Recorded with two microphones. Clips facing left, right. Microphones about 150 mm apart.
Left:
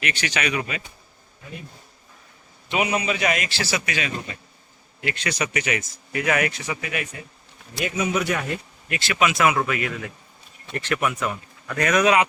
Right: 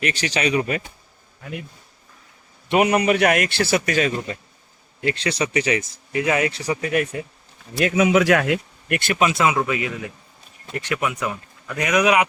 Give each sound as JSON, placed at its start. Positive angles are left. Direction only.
{"t": 0.0, "sound": "speech", "side_deg": -35}
{"t": 2.6, "sound": "a man's voice", "side_deg": -60}
{"t": 4.9, "sound": "speech", "side_deg": -30}
{"t": 6.6, "sound": "speech", "side_deg": -40}
{"t": 7.9, "sound": "speech", "side_deg": -90}
{"t": 9.1, "sound": "speech", "side_deg": -30}